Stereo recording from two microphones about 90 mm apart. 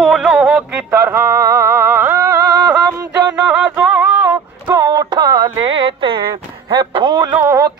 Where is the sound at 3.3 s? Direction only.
15° right (ahead or behind).